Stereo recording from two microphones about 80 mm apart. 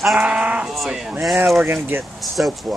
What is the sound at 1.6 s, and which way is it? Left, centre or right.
Speech, right.